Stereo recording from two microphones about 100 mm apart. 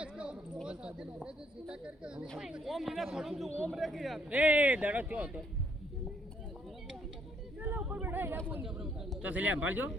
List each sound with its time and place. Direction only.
0.0 s speech: 10° right (ahead or behind)
4.3 s speech: 15° right (ahead or behind)
7.8 s a sound: 10° right (ahead or behind)
8.0 s speech: 20° right (ahead or behind)
8.6 s bird: 5° right (ahead or behind)
9.2 s speech: 15° right (ahead or behind)